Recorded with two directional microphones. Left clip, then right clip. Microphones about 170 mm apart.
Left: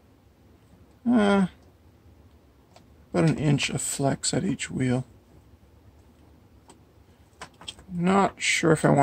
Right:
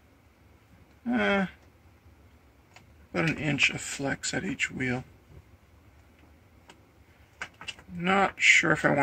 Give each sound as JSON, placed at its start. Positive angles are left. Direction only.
{"t": 1.1, "sound": "speech", "side_deg": 90}
{"t": 3.1, "sound": "speech", "side_deg": 90}
{"t": 8.0, "sound": "speech", "side_deg": 90}